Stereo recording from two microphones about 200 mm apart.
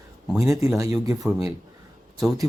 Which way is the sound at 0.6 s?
15° right (ahead or behind).